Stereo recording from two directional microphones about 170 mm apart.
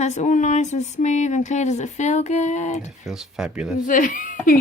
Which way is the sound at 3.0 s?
5° right (ahead or behind).